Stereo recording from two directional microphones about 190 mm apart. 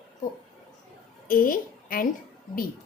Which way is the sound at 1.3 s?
45° left (ahead or behind).